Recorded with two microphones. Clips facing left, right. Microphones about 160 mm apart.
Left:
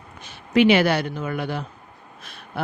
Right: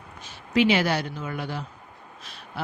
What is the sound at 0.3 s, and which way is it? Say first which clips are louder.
Speech: left 5 dB; 60° left (ahead or behind).